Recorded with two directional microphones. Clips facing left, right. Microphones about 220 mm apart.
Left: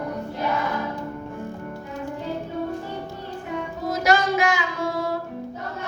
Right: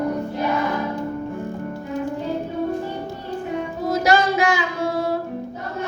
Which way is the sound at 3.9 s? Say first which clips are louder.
Right 2 dB; 30° right (ahead or behind).